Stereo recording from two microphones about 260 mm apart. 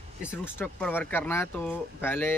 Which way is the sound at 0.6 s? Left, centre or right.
Centre.